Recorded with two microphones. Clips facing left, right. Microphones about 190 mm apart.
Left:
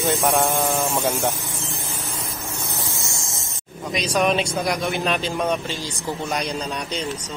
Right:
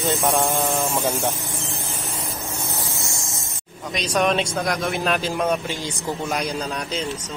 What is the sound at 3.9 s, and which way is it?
A man's voice, centre (ahead or behind).